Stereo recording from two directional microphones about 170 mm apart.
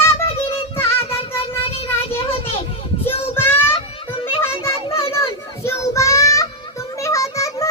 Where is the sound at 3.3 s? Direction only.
15° left (ahead or behind).